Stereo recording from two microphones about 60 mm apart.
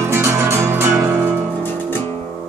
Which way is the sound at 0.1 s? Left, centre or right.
Right.